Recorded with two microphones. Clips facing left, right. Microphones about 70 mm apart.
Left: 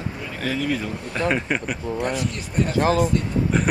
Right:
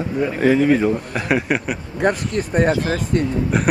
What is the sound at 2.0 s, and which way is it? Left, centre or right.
Speech, right.